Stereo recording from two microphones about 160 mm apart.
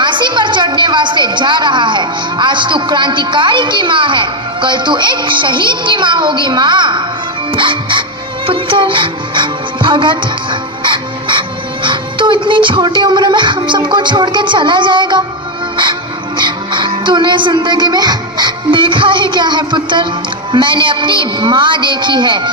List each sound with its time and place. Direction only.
0.0 s a woman's voice: 30° right (ahead or behind)
7.5 s music: 30° right (ahead or behind)
16.4 s a woman's voice: 30° right (ahead or behind)